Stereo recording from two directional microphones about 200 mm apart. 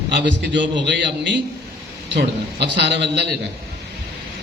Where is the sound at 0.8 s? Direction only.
60° right (ahead or behind).